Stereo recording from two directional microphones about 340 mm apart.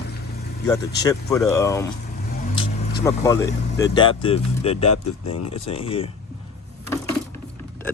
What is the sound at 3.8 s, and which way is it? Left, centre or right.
Speech, centre.